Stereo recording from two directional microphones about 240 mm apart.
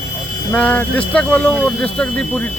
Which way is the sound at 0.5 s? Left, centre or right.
Centre.